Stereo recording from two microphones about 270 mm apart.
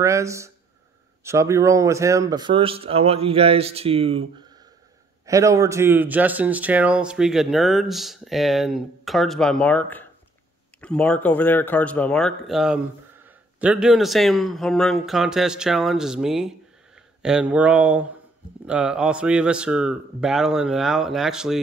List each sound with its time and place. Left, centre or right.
0.0 s speech: centre
5.2 s speech: centre